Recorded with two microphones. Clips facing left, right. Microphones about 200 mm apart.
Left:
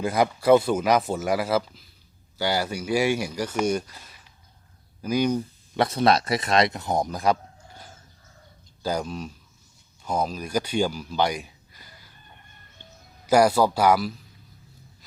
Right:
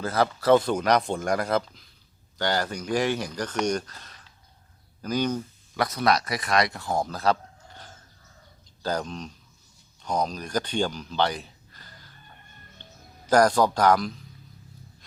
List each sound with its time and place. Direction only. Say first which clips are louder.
0.0 s speech: left 2 dB; 15° left (ahead or behind)
5.7 s speech: left 3 dB; 25° left (ahead or behind)
12.8 s bird: left 1 dB; 10° left (ahead or behind)